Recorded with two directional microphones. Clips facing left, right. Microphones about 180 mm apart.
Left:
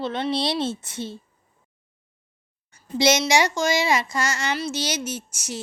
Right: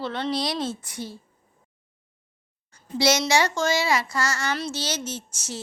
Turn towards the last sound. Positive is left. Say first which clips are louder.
# left 2 dB
turn(degrees=10)  # may be behind; listen again after turning